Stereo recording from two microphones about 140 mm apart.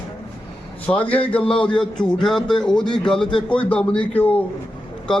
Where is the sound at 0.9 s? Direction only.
10° left (ahead or behind).